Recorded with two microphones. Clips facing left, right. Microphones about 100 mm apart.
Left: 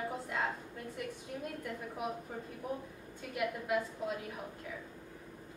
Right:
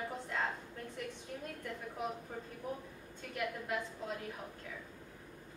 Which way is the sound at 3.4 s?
10° left (ahead or behind).